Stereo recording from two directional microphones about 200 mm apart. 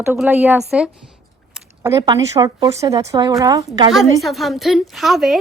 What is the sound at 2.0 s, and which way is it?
A woman's voice, 20° right (ahead or behind).